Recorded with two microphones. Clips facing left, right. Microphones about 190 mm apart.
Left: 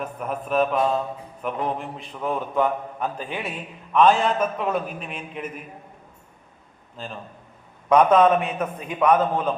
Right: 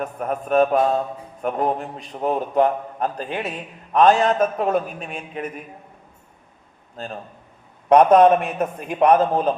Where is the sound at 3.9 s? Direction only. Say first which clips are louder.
Right 3 dB; 40° right (ahead or behind).